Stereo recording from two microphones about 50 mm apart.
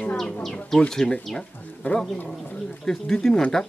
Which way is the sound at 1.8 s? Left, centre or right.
Left.